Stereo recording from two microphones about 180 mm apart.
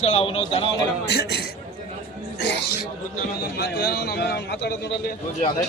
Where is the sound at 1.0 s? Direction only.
65° left (ahead or behind).